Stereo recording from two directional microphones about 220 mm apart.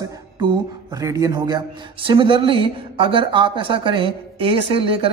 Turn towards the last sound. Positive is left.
turn(degrees=-25)  # may be behind; listen again after turning